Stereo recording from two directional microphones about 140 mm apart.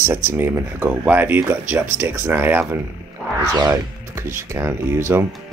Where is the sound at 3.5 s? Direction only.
25° right (ahead or behind).